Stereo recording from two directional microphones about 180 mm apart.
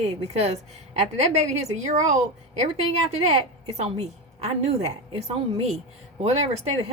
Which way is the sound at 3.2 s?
35° right (ahead or behind).